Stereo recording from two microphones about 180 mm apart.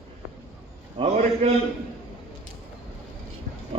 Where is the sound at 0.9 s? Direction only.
35° right (ahead or behind).